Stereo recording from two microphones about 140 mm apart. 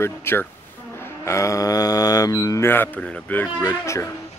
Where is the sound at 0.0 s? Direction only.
15° left (ahead or behind).